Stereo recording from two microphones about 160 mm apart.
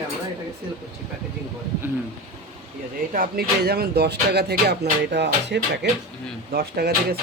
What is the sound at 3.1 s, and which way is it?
Music, 65° right (ahead or behind).